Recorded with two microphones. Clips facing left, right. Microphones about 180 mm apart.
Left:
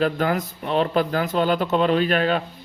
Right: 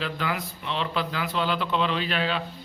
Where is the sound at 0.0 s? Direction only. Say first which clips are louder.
Left 8 dB; 45° left (ahead or behind).